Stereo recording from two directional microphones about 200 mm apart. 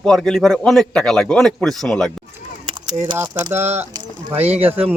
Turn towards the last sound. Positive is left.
turn(degrees=-10)  # may be behind; listen again after turning